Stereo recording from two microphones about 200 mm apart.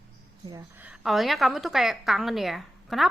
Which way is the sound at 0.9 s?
Centre (ahead or behind).